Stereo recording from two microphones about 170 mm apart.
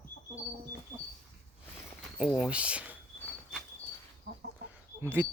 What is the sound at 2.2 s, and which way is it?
Speech, 5° right (ahead or behind).